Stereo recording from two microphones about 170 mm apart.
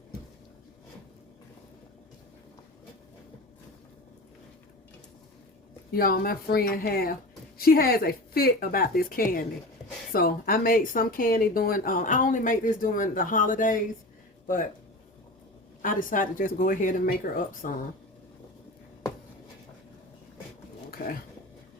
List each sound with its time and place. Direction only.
5.9 s speech: 60° left (ahead or behind)
15.8 s speech: 50° left (ahead or behind)